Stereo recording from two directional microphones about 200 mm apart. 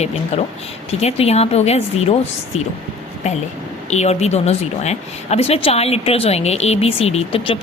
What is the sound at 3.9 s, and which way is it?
A woman's voice, 35° left (ahead or behind).